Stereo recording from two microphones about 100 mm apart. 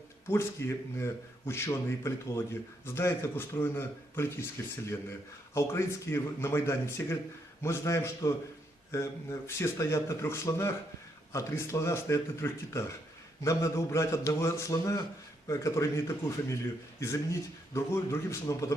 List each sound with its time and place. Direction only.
0.3 s a man's voice: 25° left (ahead or behind)